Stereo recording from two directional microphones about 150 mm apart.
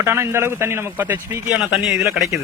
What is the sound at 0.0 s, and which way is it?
Speech, 15° right (ahead or behind).